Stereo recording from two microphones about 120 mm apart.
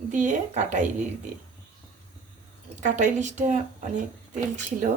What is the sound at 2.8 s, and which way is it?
Speech, 90° right.